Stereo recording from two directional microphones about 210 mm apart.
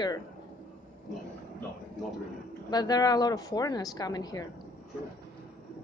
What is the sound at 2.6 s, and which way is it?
Speech, 20° left (ahead or behind).